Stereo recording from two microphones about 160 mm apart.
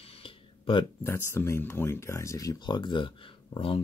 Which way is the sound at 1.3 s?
15° left (ahead or behind).